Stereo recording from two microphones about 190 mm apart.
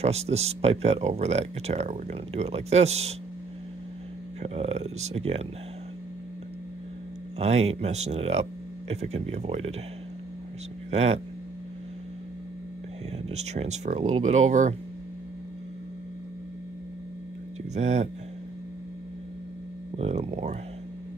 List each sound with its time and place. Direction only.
0.0 s speech: 35° right (ahead or behind)
4.4 s speech: 30° right (ahead or behind)
7.3 s speech: 35° right (ahead or behind)
10.9 s speech: 35° right (ahead or behind)
13.3 s speech: 35° right (ahead or behind)
17.7 s speech: 35° right (ahead or behind)
20.0 s speech: 35° right (ahead or behind)